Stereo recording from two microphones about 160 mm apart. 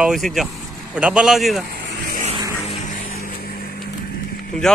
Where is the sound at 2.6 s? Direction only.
45° left (ahead or behind).